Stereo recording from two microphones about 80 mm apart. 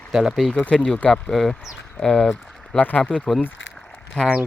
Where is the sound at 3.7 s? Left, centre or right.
Centre.